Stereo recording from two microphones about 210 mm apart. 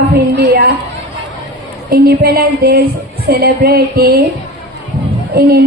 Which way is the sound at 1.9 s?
45° right (ahead or behind).